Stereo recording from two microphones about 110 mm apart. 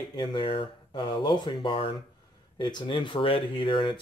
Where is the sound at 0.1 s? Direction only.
45° left (ahead or behind).